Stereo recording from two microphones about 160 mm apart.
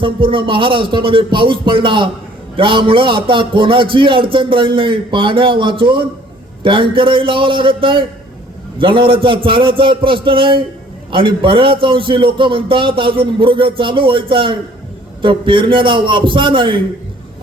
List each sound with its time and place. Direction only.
0.0 s a man's voice: 30° right (ahead or behind)